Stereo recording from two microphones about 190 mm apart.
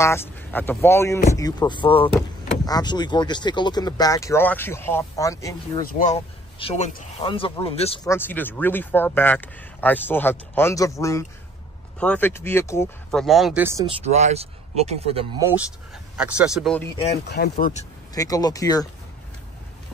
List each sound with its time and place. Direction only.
0.0 s speech: 10° left (ahead or behind)
5.9 s speech: 45° left (ahead or behind)
6.6 s speech: 35° left (ahead or behind)
8.0 s speech: 15° left (ahead or behind)
13.1 s speech: centre (ahead or behind)
13.8 s speech: 35° right (ahead or behind)
16.2 s speech: 5° right (ahead or behind)
17.3 s speech: 55° left (ahead or behind)
18.1 s speech: 20° left (ahead or behind)